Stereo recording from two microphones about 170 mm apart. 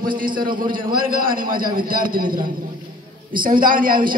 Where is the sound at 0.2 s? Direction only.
55° right (ahead or behind).